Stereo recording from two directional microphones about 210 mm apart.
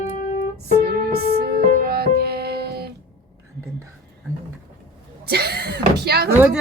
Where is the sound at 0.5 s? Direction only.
50° right (ahead or behind).